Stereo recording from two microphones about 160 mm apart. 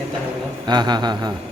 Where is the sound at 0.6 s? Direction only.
25° right (ahead or behind).